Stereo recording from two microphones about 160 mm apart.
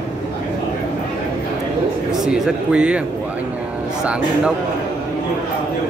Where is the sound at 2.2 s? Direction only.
5° right (ahead or behind).